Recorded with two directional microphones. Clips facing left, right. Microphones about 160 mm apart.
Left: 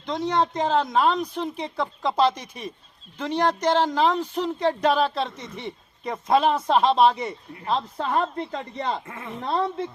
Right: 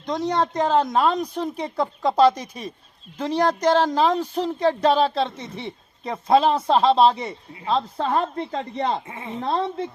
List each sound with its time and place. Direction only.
0.0 s speech: 45° right (ahead or behind)
9.0 s a child's voice: 20° right (ahead or behind)